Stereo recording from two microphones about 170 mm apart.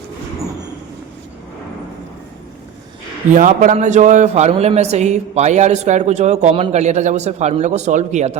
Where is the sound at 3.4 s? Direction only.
50° right (ahead or behind).